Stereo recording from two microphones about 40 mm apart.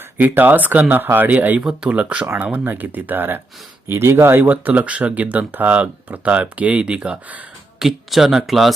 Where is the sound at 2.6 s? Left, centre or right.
Right.